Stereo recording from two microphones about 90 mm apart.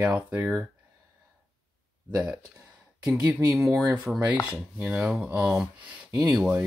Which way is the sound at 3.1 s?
15° right (ahead or behind).